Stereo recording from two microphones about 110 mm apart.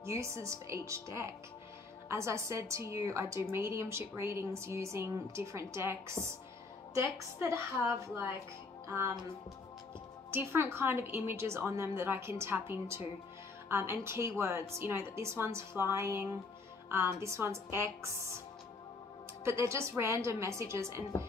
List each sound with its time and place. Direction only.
0.0 s a woman's voice: 25° right (ahead or behind)
8.8 s music: 25° right (ahead or behind)
10.3 s a woman's voice: 20° right (ahead or behind)
19.4 s a woman's voice: 25° right (ahead or behind)